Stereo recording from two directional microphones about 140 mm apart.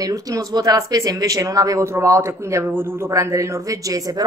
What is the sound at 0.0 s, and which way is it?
Speech, 25° right (ahead or behind).